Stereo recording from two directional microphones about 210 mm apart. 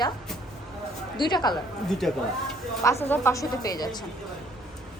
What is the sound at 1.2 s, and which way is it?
Speech, 20° left (ahead or behind).